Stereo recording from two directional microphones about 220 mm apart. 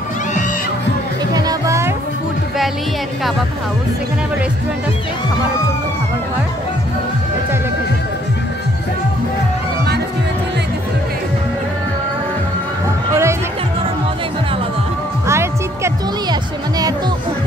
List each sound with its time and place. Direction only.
1.3 s music: 15° right (ahead or behind)
13.1 s music: 10° right (ahead or behind)
15.2 s music: 10° right (ahead or behind)